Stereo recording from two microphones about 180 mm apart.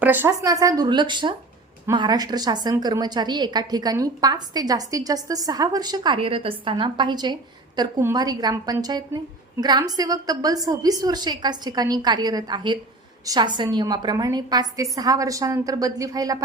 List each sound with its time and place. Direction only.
0.0 s a woman's voice: 10° right (ahead or behind)